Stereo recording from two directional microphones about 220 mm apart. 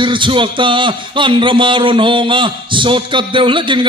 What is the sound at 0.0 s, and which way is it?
Speech, 20° right (ahead or behind).